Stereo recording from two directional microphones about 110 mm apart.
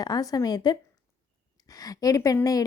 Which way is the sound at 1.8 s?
30° left (ahead or behind).